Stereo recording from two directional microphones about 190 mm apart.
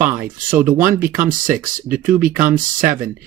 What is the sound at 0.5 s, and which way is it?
Speech, 10° right (ahead or behind).